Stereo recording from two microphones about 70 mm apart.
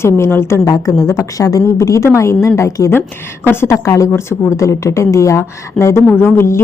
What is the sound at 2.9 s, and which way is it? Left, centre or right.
Speech, left.